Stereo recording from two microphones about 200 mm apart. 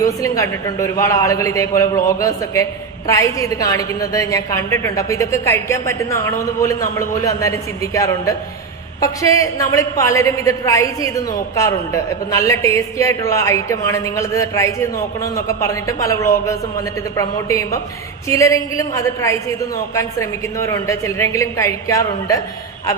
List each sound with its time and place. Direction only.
0.0 s a woman's voice: 15° left (ahead or behind)